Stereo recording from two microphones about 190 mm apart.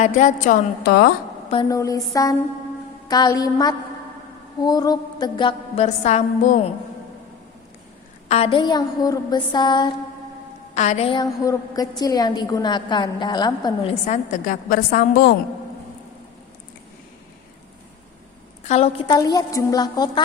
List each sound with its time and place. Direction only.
0.0 s a woman's voice: 40° left (ahead or behind)
0.9 s a woman's voice: 55° left (ahead or behind)
1.6 s a woman's voice: 20° left (ahead or behind); by 6.6 s 40° left (ahead or behind)
8.3 s a woman's voice: 30° left (ahead or behind)
10.8 s a woman's voice: 35° left (ahead or behind)
14.1 s a woman's voice: 40° left (ahead or behind)
18.6 s a woman's voice: 35° left (ahead or behind)